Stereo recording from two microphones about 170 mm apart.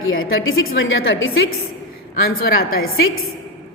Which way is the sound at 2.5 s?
60° left (ahead or behind).